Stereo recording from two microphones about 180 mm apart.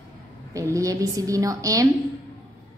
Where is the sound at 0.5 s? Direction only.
20° right (ahead or behind).